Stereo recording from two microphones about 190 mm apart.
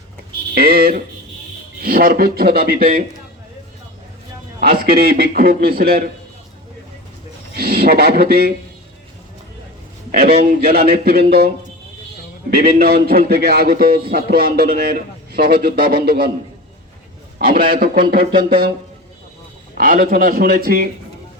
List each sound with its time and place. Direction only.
0.5 s a man's voice: 50° right (ahead or behind)
4.6 s a man's voice: 50° right (ahead or behind)
7.5 s speech: 55° right (ahead or behind)
10.1 s a man's voice: 55° right (ahead or behind)
17.3 s a man's voice: 50° right (ahead or behind)
19.7 s a man's voice: 45° right (ahead or behind)